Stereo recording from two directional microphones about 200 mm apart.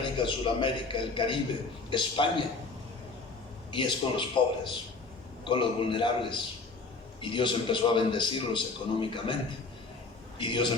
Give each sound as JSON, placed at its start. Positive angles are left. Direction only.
{"t": 0.2, "sound": "a man's voice", "side_deg": 25}
{"t": 3.7, "sound": "a man's voice", "side_deg": 25}